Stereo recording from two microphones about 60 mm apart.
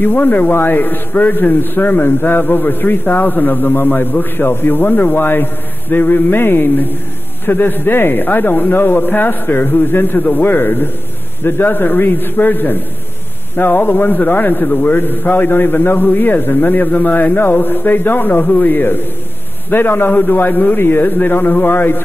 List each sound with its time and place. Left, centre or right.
0.0 s a man's voice: left